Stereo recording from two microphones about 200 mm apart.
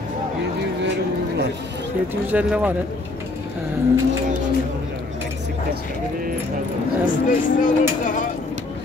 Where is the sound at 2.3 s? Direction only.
5° right (ahead or behind).